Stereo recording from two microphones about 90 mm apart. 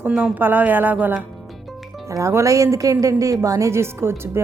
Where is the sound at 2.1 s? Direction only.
35° right (ahead or behind).